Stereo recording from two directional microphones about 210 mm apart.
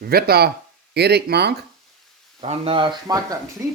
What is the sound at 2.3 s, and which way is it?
Speech, 30° right (ahead or behind).